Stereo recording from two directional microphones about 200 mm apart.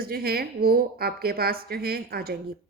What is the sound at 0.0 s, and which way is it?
A woman's voice, 50° right (ahead or behind).